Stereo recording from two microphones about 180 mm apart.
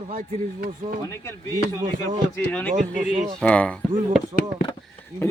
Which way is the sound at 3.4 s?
5° left (ahead or behind).